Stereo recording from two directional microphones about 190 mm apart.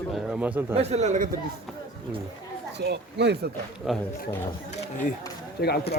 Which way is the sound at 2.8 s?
60° right (ahead or behind).